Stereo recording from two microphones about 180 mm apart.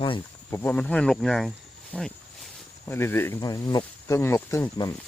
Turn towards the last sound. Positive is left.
turn(degrees=20)  # may be behind; listen again after turning